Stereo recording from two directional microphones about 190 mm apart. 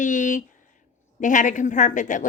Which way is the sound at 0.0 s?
40° left (ahead or behind).